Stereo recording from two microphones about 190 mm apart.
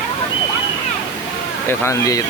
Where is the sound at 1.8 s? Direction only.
15° left (ahead or behind).